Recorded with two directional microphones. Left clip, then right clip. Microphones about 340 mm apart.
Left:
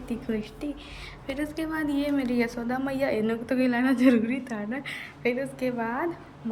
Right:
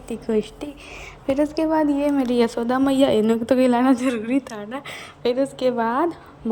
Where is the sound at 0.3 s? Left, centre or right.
Centre.